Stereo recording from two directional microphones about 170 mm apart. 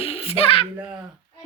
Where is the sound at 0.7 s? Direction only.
10° right (ahead or behind).